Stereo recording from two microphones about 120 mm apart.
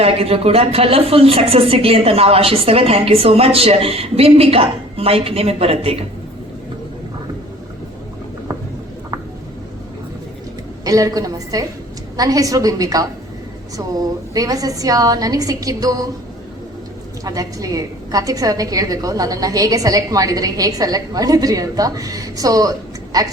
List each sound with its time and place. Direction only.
0.0 s a woman's voice: 55° right (ahead or behind)
10.8 s a woman's voice: 30° right (ahead or behind)
17.2 s a woman's voice: 30° right (ahead or behind)